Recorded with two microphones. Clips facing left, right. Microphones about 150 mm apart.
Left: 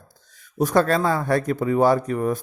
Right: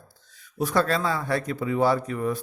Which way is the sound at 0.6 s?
45° left (ahead or behind).